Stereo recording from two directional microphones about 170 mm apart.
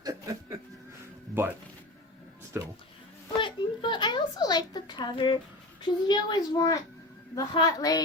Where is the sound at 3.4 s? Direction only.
30° left (ahead or behind).